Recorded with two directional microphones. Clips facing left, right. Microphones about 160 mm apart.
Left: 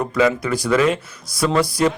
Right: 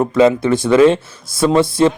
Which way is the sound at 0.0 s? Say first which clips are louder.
Right 6 dB; 25° right (ahead or behind).